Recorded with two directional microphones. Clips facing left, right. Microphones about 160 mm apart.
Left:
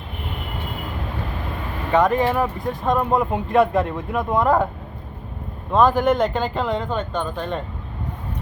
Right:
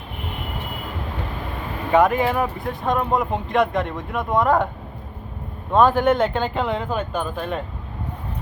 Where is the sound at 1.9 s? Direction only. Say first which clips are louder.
Even; 5° right (ahead or behind).